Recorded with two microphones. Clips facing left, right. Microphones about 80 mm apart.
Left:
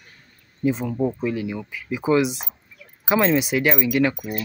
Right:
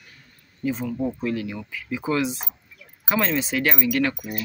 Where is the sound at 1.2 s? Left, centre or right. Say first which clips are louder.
Left 2 dB; centre.